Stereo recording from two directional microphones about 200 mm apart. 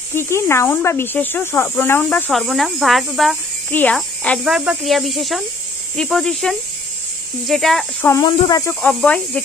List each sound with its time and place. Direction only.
0.1 s speech: 10° left (ahead or behind)
8.1 s speech: 20° left (ahead or behind)
8.8 s speech: 5° left (ahead or behind)